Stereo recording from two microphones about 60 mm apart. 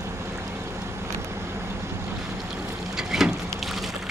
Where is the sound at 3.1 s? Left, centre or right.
Centre.